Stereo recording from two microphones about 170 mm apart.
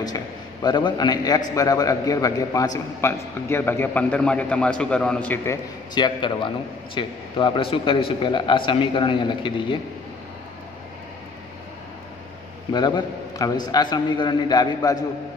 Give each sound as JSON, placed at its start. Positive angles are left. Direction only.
{"t": 0.0, "sound": "a man's voice", "side_deg": 25}
{"t": 12.7, "sound": "a man's voice", "side_deg": 25}